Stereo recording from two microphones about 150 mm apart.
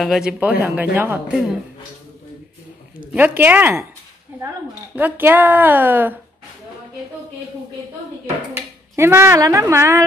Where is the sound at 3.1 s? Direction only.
15° right (ahead or behind).